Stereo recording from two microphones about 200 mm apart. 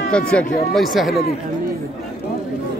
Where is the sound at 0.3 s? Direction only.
5° left (ahead or behind).